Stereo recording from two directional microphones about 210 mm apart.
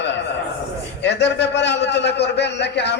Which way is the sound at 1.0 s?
55° left (ahead or behind).